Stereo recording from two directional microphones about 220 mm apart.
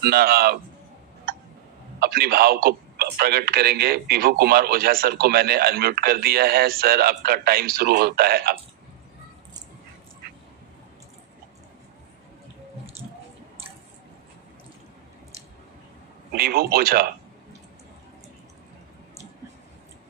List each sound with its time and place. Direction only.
0.0 s a man's voice: 45° right (ahead or behind)
2.0 s a man's voice: 45° right (ahead or behind)
16.3 s a man's voice: 45° right (ahead or behind)